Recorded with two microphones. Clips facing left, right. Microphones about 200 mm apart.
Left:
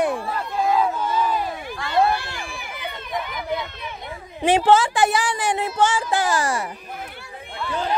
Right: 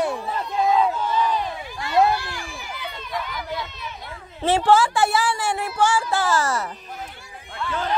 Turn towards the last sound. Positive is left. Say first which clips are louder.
# left 1 dB
turn(degrees=15)  # may be behind; listen again after turning